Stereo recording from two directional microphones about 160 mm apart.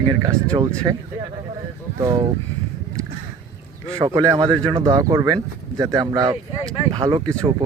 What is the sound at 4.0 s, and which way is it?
Speech, 25° right (ahead or behind).